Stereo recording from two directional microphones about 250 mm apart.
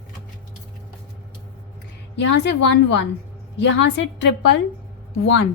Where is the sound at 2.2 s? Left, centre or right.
Left.